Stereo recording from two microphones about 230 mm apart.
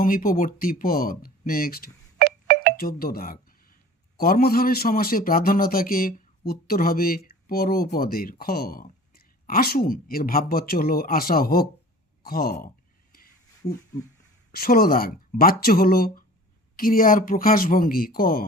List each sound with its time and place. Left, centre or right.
0.0 s a man's voice: left
2.1 s music: right
2.7 s a sound: left
4.2 s a man's voice: left
14.5 s a man's voice: left